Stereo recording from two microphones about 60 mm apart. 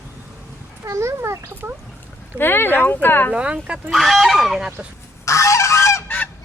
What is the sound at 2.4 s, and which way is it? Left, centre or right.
Speech, left.